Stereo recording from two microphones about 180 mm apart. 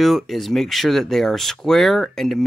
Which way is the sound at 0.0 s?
Centre (ahead or behind).